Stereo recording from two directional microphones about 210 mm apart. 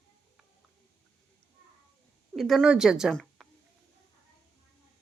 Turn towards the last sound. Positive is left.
turn(degrees=0)  # may be behind; listen again after turning